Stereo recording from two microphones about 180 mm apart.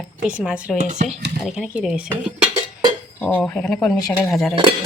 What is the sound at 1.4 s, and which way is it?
A woman's voice, centre (ahead or behind).